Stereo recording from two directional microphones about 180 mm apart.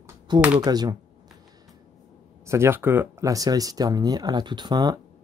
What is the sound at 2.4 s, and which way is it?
Speech, 15° right (ahead or behind).